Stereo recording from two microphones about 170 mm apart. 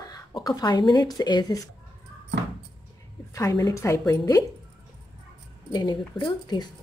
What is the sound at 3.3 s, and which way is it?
A woman's voice, 20° left (ahead or behind).